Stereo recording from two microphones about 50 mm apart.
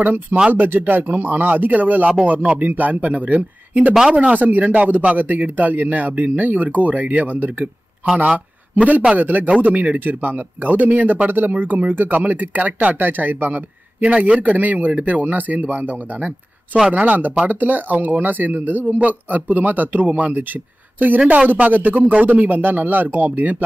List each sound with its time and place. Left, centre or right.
0.0 s a man's voice: right
21.5 s speech: right